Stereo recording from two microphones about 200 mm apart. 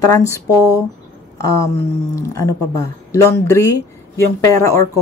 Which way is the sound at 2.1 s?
15° left (ahead or behind).